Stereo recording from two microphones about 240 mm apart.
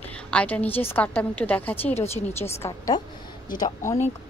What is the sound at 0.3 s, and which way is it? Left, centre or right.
A woman's voice, centre.